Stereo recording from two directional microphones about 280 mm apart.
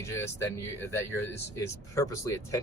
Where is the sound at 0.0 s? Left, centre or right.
Centre.